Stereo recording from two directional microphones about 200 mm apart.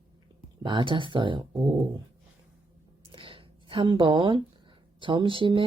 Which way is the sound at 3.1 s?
25° right (ahead or behind).